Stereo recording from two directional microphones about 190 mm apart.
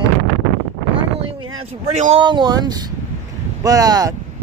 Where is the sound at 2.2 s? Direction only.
20° right (ahead or behind).